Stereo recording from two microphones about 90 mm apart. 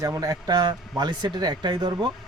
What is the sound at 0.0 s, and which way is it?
Speech, 40° right (ahead or behind).